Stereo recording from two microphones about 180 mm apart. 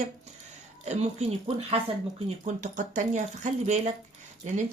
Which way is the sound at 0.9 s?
35° right (ahead or behind).